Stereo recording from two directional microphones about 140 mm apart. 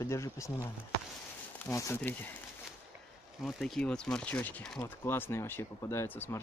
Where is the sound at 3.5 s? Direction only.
Centre (ahead or behind).